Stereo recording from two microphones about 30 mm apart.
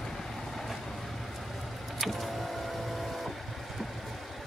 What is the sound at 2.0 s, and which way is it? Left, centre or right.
Vehicle, centre.